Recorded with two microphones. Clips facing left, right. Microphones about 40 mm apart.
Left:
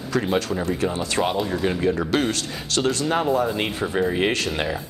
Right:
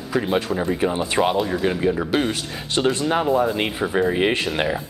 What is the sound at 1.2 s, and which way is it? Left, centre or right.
Speech, centre.